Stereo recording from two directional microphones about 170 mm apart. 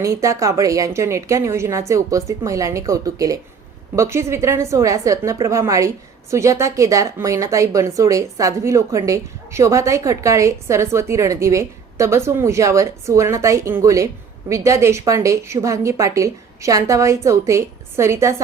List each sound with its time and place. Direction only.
0.0 s a woman's voice: 20° right (ahead or behind)